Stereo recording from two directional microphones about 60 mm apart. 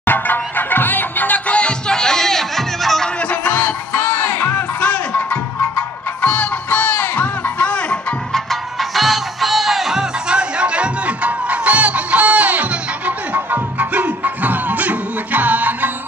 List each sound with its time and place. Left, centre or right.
0.0 s music: left; by 3.1 s centre
3.2 s music: left
8.3 s music: centre; by 15.9 s right